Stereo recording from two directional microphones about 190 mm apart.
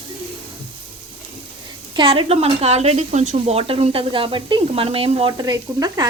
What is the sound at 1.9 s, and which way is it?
Speech, 25° right (ahead or behind).